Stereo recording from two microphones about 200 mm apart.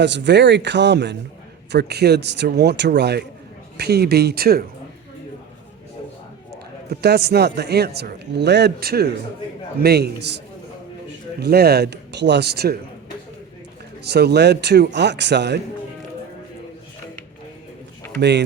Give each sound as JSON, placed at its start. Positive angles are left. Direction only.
{"t": 0.0, "sound": "a man's voice", "side_deg": -60}
{"t": 6.9, "sound": "a man's voice", "side_deg": -55}
{"t": 11.3, "sound": "a man's voice", "side_deg": -55}
{"t": 14.0, "sound": "a man's voice", "side_deg": -55}
{"t": 18.2, "sound": "a man's voice", "side_deg": -60}